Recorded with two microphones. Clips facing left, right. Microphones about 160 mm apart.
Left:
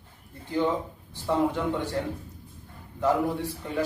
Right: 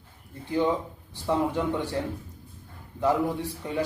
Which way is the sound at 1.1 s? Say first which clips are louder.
Left 1 dB; 15° right (ahead or behind).